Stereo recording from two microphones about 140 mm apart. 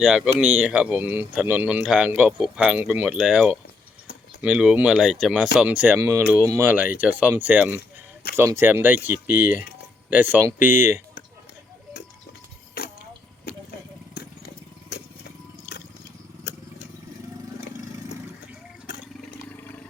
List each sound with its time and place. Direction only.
0.0 s speech: 5° right (ahead or behind)
12.8 s a sound: 90° left
19.5 s vehicle: 15° left (ahead or behind)